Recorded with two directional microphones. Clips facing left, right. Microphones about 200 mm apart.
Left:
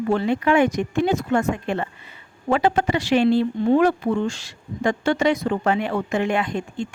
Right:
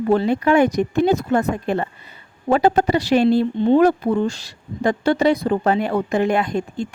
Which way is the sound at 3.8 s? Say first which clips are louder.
Right 3 dB; 40° right (ahead or behind).